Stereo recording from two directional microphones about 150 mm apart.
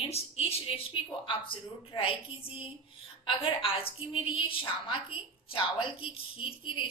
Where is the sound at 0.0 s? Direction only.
40° left (ahead or behind).